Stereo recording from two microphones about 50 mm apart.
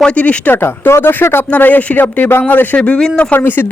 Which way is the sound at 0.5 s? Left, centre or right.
Left.